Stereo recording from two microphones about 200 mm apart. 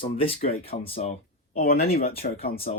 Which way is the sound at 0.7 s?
30° left (ahead or behind).